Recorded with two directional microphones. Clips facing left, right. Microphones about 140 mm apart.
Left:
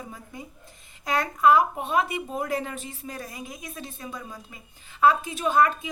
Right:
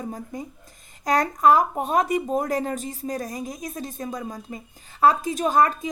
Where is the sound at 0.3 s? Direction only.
40° right (ahead or behind).